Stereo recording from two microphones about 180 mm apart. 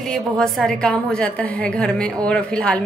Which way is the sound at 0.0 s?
5° left (ahead or behind).